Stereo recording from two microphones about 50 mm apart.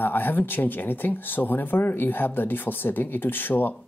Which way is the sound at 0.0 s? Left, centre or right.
Left.